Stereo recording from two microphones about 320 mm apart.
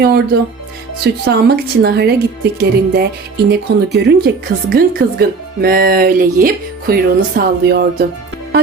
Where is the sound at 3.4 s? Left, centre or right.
Right.